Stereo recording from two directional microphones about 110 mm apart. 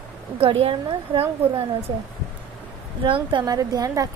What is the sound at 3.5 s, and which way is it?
Speech, 35° right (ahead or behind).